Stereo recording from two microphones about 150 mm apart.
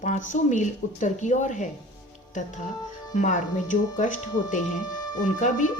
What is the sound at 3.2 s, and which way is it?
Speech, 55° left (ahead or behind).